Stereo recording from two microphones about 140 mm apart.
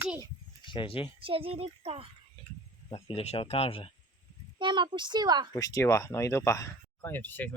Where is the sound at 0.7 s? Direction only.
40° left (ahead or behind).